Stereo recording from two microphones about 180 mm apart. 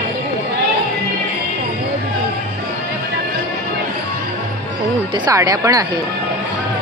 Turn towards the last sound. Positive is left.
turn(degrees=-20)  # may be behind; listen again after turning